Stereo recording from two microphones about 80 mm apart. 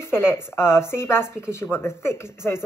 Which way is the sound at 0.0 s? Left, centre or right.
Left.